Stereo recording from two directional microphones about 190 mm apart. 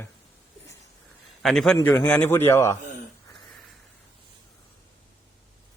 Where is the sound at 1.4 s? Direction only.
Centre (ahead or behind).